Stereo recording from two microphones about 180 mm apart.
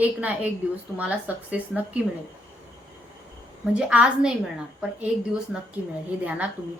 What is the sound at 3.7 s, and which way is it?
Speech, 5° right (ahead or behind).